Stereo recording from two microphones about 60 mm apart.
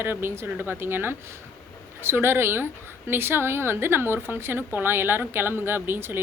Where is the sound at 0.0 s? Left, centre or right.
Right.